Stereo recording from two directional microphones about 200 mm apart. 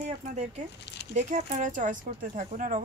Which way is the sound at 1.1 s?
40° right (ahead or behind).